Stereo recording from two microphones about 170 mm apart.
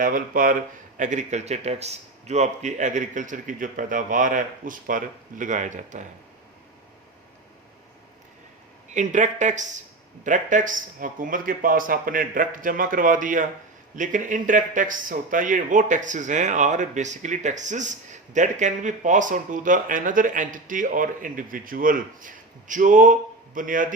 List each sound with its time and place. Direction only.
0.0 s a man's voice: 55° right (ahead or behind)
8.9 s a man's voice: 45° right (ahead or behind)